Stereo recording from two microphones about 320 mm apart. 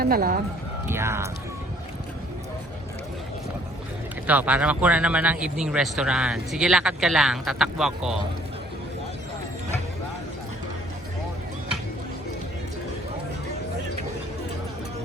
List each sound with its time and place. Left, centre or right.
0.0 s speech: right
0.9 s speech: centre
4.3 s speech: centre